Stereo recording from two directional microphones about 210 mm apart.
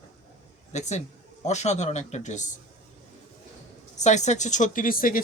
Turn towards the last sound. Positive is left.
turn(degrees=40)  # may be behind; listen again after turning